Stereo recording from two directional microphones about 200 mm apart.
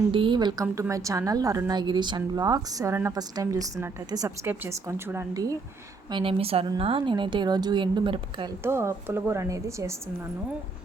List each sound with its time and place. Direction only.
0.1 s a woman's voice: 25° right (ahead or behind)
8.6 s a woman's voice: 10° right (ahead or behind)